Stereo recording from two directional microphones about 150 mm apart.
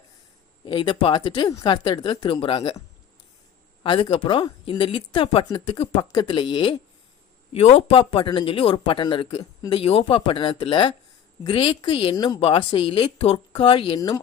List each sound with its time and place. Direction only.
0.6 s speech: 30° left (ahead or behind)
3.8 s speech: 35° left (ahead or behind)